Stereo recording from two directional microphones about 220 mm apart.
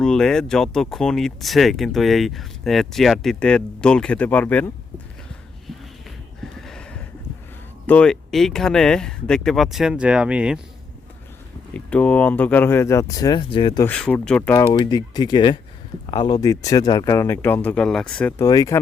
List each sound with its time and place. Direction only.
0.0 s speech: 5° left (ahead or behind)
6.4 s a sound: centre (ahead or behind)
7.9 s speech: 5° left (ahead or behind)
11.7 s speech: 5° left (ahead or behind); by 13.8 s 20° left (ahead or behind)
13.8 s speech: 5° left (ahead or behind)
14.5 s speech: 15° left (ahead or behind)